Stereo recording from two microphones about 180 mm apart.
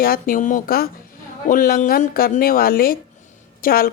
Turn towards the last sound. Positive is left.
turn(degrees=55)  # may be behind; listen again after turning